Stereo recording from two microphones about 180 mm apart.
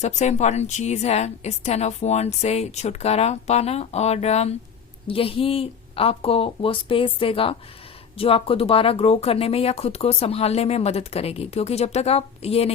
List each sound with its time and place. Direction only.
0.0 s a woman's voice: 40° left (ahead or behind)